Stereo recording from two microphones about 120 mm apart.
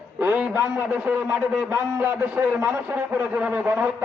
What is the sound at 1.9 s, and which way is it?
A man's voice, 20° right (ahead or behind).